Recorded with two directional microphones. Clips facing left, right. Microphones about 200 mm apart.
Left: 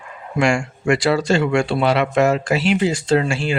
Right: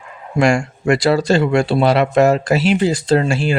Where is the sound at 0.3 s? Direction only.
40° right (ahead or behind).